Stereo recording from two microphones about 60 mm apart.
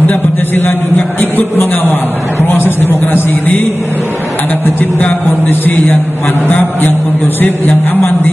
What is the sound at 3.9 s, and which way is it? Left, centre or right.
Speech, right.